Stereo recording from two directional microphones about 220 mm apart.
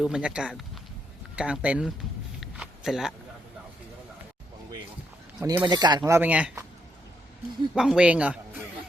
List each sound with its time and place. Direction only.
0.0 s speech: 5° right (ahead or behind)
2.4 s a sound: centre (ahead or behind)
5.4 s speech: 15° right (ahead or behind)
7.8 s a man's voice: 5° right (ahead or behind)